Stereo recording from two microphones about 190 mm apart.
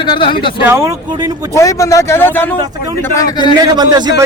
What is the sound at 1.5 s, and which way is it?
A man's voice, 15° left (ahead or behind).